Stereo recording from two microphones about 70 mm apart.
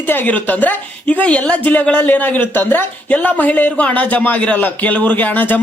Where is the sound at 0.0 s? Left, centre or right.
Left.